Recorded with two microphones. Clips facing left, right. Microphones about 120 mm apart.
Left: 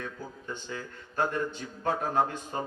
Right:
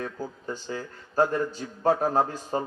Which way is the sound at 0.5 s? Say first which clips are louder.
Right 4 dB; 35° right (ahead or behind).